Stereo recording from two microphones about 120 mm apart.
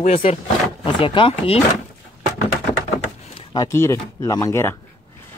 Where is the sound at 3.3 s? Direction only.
35° left (ahead or behind).